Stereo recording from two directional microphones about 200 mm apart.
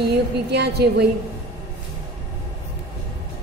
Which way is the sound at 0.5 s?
55° right (ahead or behind).